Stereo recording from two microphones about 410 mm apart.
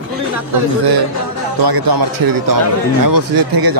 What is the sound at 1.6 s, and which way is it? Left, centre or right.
A man's voice, right.